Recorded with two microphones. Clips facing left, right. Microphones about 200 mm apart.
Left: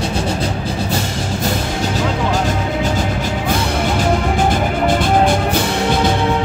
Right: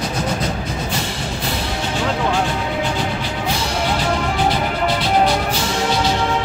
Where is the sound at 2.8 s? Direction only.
45° left (ahead or behind).